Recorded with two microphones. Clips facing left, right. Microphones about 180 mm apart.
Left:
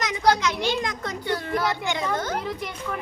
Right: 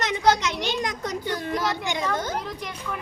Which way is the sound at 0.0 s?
25° right (ahead or behind).